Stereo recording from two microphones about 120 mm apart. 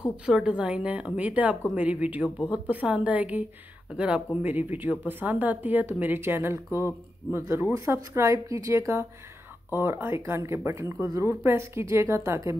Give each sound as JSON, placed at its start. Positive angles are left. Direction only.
{"t": 0.2, "sound": "speech", "side_deg": -5}